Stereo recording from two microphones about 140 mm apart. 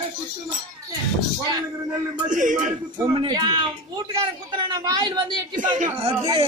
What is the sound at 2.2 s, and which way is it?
Speech, 65° right (ahead or behind).